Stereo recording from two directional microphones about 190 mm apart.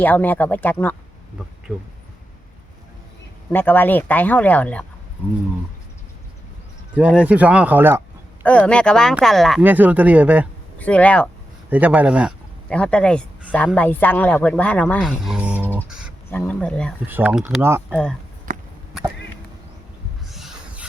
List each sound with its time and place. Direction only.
0.0 s speech: 10° left (ahead or behind)
3.5 s speech: 10° left (ahead or behind)
6.9 s speech: 5° right (ahead or behind)
8.4 s speech: 5° left (ahead or behind)
10.8 s speech: 5° left (ahead or behind)
11.7 s speech: 10° right (ahead or behind)
12.6 s speech: 5° left (ahead or behind)
15.9 s a sound: 5° right (ahead or behind)
16.3 s speech: 10° left (ahead or behind)
17.1 s speech: 10° right (ahead or behind)
18.5 s a sound: 45° right (ahead or behind)
20.3 s a sound: centre (ahead or behind)